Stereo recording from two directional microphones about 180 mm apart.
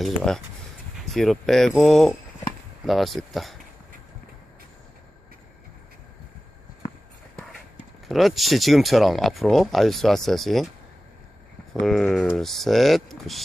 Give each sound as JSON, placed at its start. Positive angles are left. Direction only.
{"t": 0.0, "sound": "speech", "side_deg": 0}
{"t": 8.0, "sound": "speech", "side_deg": 0}
{"t": 11.7, "sound": "speech", "side_deg": 0}